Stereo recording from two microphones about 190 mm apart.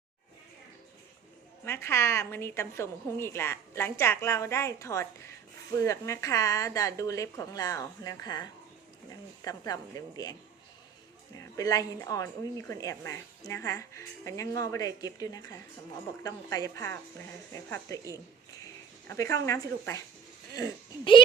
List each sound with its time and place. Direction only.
1.6 s a woman's voice: 15° left (ahead or behind)
11.3 s a woman's voice: 20° left (ahead or behind)
18.6 s a sound: 15° left (ahead or behind)
20.6 s speech: 25° left (ahead or behind)